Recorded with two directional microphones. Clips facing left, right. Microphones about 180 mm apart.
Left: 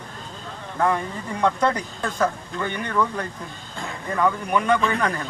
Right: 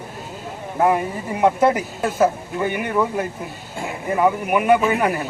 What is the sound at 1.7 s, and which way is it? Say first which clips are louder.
Speech: right 5 dB; 5° right (ahead or behind).